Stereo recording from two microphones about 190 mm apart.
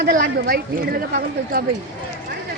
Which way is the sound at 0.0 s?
45° right (ahead or behind).